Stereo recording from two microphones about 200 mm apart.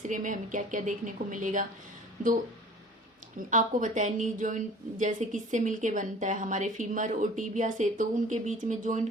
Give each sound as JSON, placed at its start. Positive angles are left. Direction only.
{"t": 0.0, "sound": "a woman's voice", "side_deg": -40}